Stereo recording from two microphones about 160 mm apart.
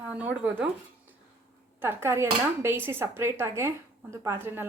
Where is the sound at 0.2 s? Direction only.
10° right (ahead or behind).